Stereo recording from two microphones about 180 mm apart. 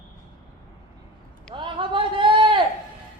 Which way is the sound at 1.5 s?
25° right (ahead or behind).